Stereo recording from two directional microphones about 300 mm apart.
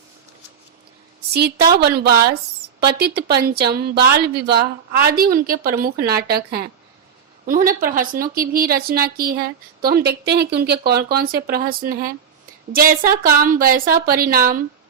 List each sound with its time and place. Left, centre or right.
1.3 s a woman's voice: right